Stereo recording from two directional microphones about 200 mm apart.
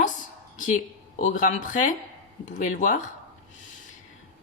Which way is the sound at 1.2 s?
40° left (ahead or behind).